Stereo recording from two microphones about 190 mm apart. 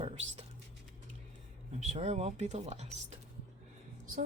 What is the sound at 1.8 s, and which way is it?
Speech, 35° right (ahead or behind).